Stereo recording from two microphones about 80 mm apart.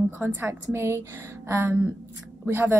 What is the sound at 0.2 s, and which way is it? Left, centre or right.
A woman's voice, right.